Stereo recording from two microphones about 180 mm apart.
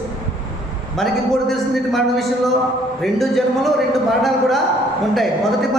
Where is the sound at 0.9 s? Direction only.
Centre (ahead or behind).